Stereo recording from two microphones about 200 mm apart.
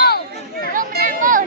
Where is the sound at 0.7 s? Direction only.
45° right (ahead or behind).